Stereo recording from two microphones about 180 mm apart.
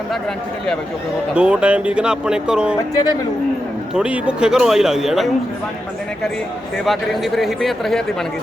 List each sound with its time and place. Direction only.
1.4 s speech: 5° right (ahead or behind)
3.9 s speech: 5° right (ahead or behind)
6.8 s speech: centre (ahead or behind)